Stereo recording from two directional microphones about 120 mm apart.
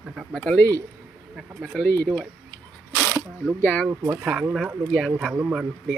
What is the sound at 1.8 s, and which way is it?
Speech, 15° left (ahead or behind).